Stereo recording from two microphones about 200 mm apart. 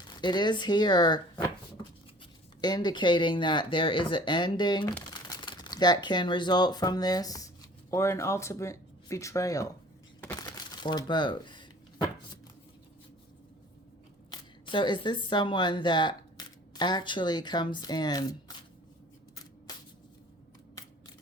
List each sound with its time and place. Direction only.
0.2 s speech: 20° left (ahead or behind)
2.6 s speech: 20° left (ahead or behind)
10.2 s a sound: 10° left (ahead or behind)
10.4 s crumpling: 20° left (ahead or behind)
14.3 s speech: 25° left (ahead or behind)